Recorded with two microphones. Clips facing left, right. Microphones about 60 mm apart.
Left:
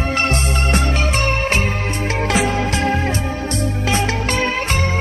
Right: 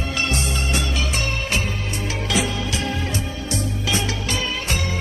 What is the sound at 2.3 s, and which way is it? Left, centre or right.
Music, left.